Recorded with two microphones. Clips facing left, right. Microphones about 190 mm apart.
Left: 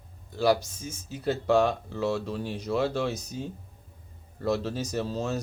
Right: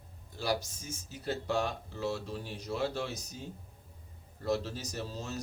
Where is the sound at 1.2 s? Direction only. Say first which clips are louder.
Left 9 dB; 75° left (ahead or behind).